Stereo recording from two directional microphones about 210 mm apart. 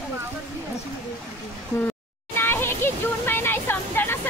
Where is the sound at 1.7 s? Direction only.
10° left (ahead or behind).